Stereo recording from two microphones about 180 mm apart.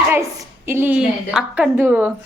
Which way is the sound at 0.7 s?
10° right (ahead or behind).